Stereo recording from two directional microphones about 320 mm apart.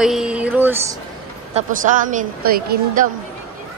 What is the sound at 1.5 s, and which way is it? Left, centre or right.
A woman's voice, right.